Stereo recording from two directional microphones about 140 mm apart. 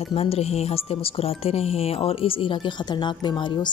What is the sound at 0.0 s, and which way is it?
A woman's voice, 45° left (ahead or behind).